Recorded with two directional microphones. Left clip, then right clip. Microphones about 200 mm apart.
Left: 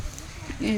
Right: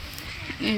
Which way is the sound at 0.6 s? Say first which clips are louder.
Right 1 dB; 10° left (ahead or behind).